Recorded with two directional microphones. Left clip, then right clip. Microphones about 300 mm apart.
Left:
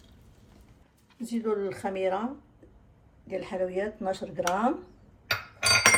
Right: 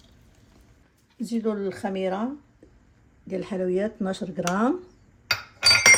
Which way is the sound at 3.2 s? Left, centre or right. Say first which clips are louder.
Right 3 dB; right.